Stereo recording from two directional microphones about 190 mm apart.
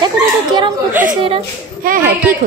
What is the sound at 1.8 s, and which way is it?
Speech, 50° right (ahead or behind).